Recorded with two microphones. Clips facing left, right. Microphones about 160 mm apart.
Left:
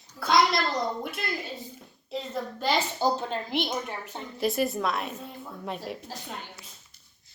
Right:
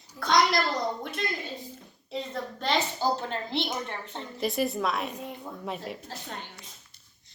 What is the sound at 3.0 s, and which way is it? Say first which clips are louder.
A woman's voice: left 2 dB; 15° left (ahead or behind).